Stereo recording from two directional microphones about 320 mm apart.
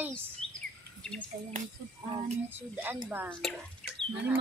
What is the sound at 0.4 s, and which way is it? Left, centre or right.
Bird, centre.